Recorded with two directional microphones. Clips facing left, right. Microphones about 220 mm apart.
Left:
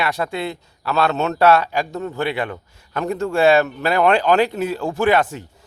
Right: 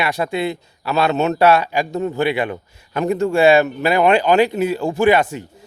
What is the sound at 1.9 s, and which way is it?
A man's voice, 15° right (ahead or behind).